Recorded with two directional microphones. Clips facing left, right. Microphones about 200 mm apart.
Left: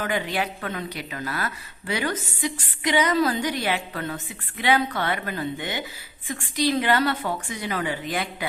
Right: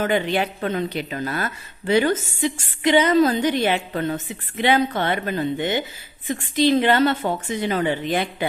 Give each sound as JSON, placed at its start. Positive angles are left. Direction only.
{"t": 0.0, "sound": "a woman's voice", "side_deg": -25}